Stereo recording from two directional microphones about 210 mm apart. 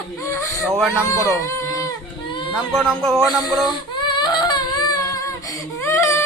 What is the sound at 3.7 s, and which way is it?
Humming, 20° left (ahead or behind).